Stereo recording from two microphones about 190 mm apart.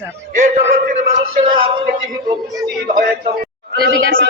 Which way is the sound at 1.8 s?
20° right (ahead or behind).